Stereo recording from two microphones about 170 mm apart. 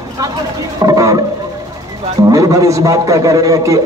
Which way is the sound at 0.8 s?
20° right (ahead or behind).